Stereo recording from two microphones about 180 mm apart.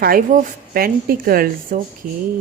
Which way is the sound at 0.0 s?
50° right (ahead or behind).